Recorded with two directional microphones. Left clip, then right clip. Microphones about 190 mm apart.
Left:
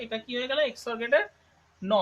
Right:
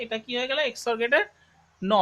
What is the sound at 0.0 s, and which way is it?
Speech, 45° right (ahead or behind).